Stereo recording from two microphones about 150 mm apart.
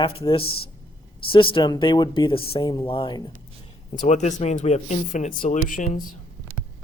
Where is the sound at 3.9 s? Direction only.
50° left (ahead or behind).